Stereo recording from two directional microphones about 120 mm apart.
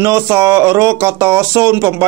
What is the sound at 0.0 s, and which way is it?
Speech, 25° right (ahead or behind).